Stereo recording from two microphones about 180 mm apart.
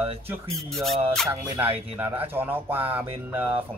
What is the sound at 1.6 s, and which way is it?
Speech, 30° right (ahead or behind).